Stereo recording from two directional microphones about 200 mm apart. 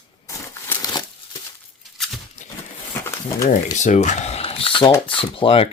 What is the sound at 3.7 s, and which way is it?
Speech, 35° left (ahead or behind).